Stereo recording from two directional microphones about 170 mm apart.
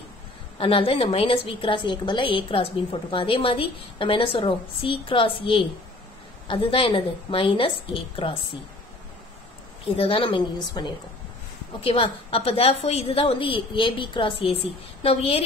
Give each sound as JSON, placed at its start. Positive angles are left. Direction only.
{"t": 0.6, "sound": "a woman's voice", "side_deg": 35}
{"t": 9.9, "sound": "a woman's voice", "side_deg": 35}